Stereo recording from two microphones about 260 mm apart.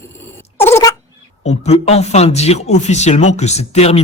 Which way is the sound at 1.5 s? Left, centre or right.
Left.